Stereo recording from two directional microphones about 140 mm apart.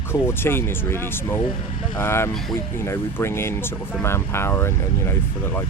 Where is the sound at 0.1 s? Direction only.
15° left (ahead or behind).